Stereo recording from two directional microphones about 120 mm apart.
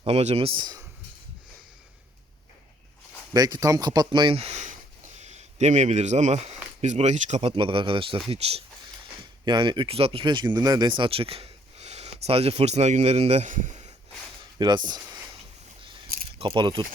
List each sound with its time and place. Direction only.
0.0 s speech: 65° right (ahead or behind); by 0.8 s 45° right (ahead or behind)
3.3 s speech: 35° right (ahead or behind)
4.4 s a sound: 65° right (ahead or behind)
5.2 s speech: 70° right (ahead or behind)
6.8 s speech: 75° right (ahead or behind)
7.5 s speech: 45° right (ahead or behind)
8.3 s speech: 55° right (ahead or behind)
9.4 s speech: 40° right (ahead or behind); by 13.9 s 80° right
14.8 s speech: 35° right (ahead or behind)
16.4 s speech: 45° right (ahead or behind)